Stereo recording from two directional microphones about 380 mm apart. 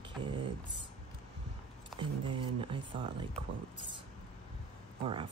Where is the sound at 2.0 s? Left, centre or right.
Centre.